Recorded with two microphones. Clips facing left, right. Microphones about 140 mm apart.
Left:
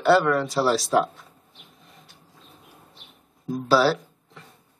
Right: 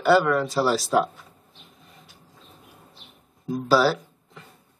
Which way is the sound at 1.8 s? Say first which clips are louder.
Even; centre (ahead or behind).